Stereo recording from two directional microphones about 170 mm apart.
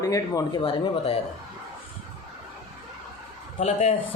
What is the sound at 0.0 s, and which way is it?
Speech, 20° left (ahead or behind).